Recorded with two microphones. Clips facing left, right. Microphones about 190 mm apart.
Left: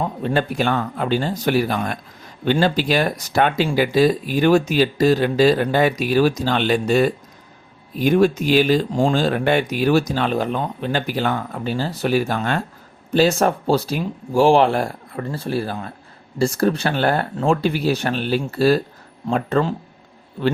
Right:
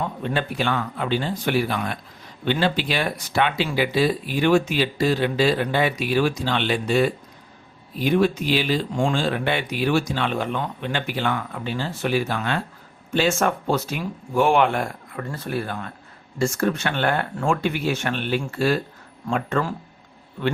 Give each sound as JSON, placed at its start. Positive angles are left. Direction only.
{"t": 0.0, "sound": "speech", "side_deg": 35}